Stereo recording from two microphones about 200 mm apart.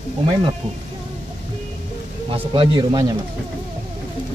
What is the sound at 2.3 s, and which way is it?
Speech, 25° right (ahead or behind).